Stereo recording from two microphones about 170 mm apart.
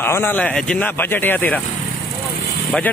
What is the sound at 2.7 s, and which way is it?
Speech, 10° left (ahead or behind).